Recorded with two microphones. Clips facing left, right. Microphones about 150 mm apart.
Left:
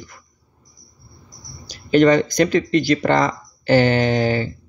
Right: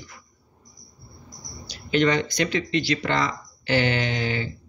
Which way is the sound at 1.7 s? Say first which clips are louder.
Left 8 dB; 45° left (ahead or behind).